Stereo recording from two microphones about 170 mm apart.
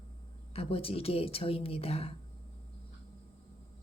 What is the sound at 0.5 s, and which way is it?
Speech, 35° left (ahead or behind).